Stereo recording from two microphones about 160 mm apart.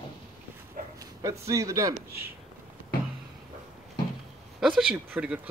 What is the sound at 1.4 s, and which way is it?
Speech, 20° right (ahead or behind).